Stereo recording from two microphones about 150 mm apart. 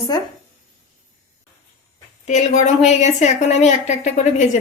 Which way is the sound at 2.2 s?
50° left (ahead or behind).